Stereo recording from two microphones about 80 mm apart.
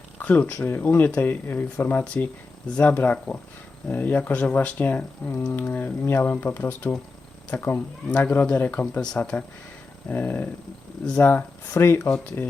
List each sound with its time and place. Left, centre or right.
0.2 s speech: left
10.1 s speech: left